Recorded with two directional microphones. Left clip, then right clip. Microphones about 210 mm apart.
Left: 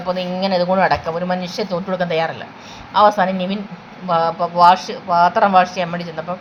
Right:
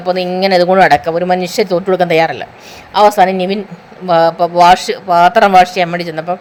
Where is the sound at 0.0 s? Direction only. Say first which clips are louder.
Right 7 dB; 55° right (ahead or behind).